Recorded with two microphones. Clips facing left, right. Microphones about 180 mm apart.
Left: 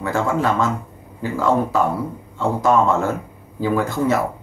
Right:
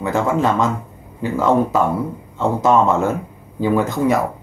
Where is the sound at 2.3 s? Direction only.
20° right (ahead or behind).